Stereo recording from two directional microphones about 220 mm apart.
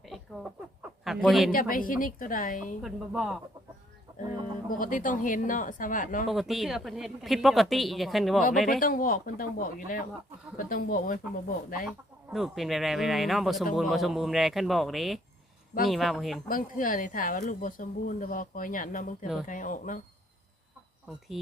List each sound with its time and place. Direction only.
0.8 s chicken: centre (ahead or behind)
1.5 s speech: 40° left (ahead or behind)
2.8 s speech: centre (ahead or behind)
4.8 s speech: 35° left (ahead or behind)
6.2 s speech: centre (ahead or behind)
8.8 s speech: 40° left (ahead or behind)
11.9 s speech: centre (ahead or behind)
16.5 s speech: 40° left (ahead or behind)